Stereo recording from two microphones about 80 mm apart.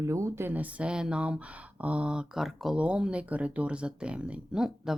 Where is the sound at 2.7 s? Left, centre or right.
Centre.